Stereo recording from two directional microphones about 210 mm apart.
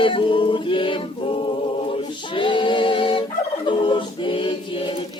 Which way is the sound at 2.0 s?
25° left (ahead or behind).